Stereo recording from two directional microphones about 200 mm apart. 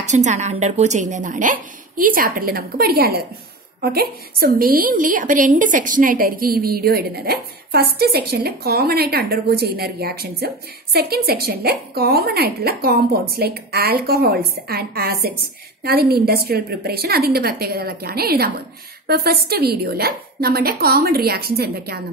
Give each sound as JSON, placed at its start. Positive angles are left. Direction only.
{"t": 0.0, "sound": "a woman's voice", "side_deg": -35}